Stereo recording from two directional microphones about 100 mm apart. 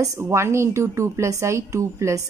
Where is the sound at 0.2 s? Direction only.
25° right (ahead or behind).